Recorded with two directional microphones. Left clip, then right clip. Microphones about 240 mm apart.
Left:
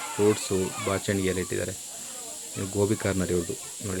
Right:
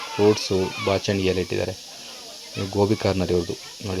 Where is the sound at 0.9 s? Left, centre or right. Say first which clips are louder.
Right 6 dB; centre.